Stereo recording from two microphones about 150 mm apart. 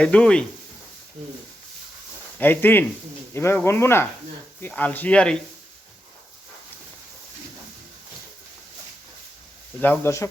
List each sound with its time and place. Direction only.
0.0 s speech: 5° left (ahead or behind)
2.4 s speech: 15° left (ahead or behind)
9.8 s speech: 15° left (ahead or behind)